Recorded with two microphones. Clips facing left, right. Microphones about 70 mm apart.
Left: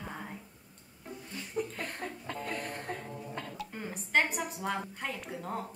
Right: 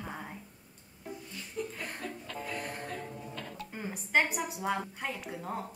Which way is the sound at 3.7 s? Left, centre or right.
Centre.